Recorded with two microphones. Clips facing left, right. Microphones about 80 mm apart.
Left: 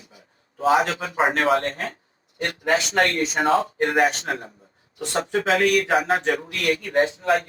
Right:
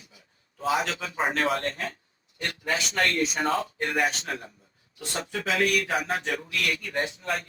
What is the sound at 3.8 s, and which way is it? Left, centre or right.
Speech, left.